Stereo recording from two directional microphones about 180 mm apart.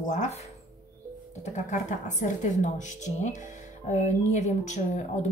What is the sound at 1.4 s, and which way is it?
Speech, 45° left (ahead or behind).